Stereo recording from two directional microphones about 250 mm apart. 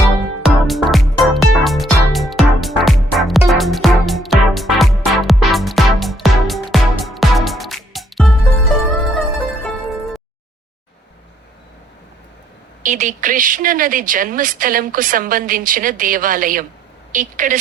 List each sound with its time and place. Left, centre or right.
0.4 s music: centre
12.8 s speech: right